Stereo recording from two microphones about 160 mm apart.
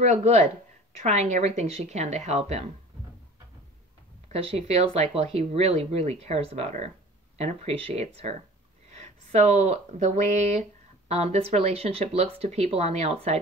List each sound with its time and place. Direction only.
0.0 s speech: 45° right (ahead or behind)
4.3 s speech: 40° right (ahead or behind)